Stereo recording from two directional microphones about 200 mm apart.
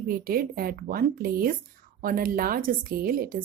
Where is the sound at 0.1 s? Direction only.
45° right (ahead or behind).